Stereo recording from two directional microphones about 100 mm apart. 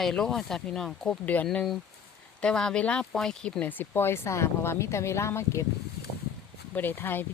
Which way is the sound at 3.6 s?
20° left (ahead or behind).